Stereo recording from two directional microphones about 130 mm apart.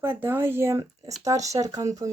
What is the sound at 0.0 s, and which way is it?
Speech, 15° right (ahead or behind).